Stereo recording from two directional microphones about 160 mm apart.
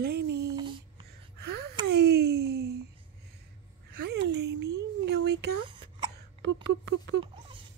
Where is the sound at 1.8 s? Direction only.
90° right.